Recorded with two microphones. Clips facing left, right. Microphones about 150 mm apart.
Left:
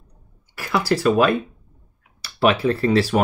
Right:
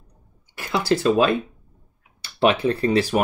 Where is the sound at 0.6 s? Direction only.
20° right (ahead or behind).